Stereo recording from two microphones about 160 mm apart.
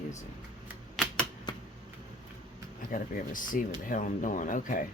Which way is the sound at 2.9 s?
55° left (ahead or behind).